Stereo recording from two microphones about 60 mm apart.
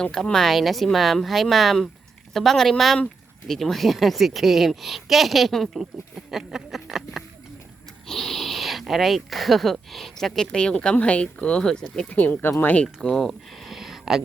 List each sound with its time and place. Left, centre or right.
0.0 s a woman's voice: centre
12.0 s speech: left
12.7 s speech: centre
13.1 s speech: centre